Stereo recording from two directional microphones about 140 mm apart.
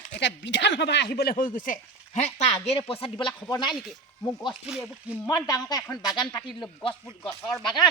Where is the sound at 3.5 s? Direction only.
30° left (ahead or behind).